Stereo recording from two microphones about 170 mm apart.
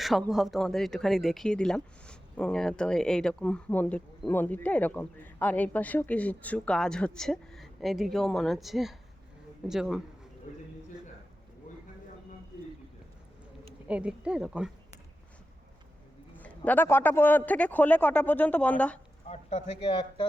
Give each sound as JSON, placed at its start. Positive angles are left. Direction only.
{"t": 0.0, "sound": "speech", "side_deg": 0}
{"t": 13.8, "sound": "speech", "side_deg": -5}
{"t": 16.4, "sound": "a man's voice", "side_deg": 10}
{"t": 19.3, "sound": "speech", "side_deg": 40}